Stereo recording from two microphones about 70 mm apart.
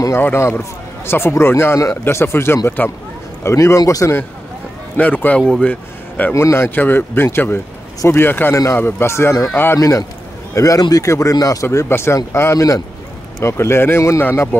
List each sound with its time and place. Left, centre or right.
0.2 s speech: left
3.4 s speech: left
4.9 s a man's voice: left
6.3 s speech: left
10.8 s speech: left
11.1 s speech: left
11.6 s speech: left
12.5 s speech: left
13.4 s speech: left